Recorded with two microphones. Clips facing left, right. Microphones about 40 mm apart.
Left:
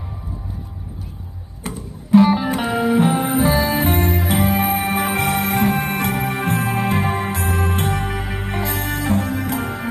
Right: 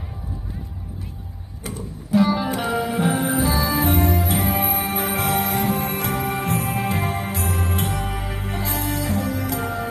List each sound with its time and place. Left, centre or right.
1.6 s music: left
2.3 s music: centre
3.0 s music: left